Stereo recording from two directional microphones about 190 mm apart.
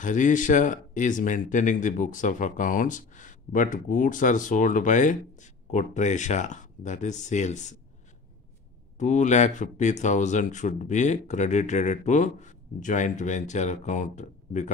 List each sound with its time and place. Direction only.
0.0 s speech: 40° left (ahead or behind)
8.9 s speech: 40° left (ahead or behind)